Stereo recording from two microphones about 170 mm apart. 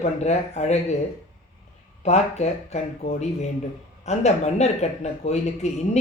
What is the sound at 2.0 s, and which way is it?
Speech, 40° left (ahead or behind).